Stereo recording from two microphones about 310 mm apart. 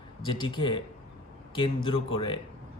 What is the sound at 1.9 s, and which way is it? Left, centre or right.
Speech, centre.